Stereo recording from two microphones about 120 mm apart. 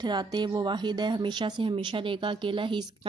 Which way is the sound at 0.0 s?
35° right (ahead or behind).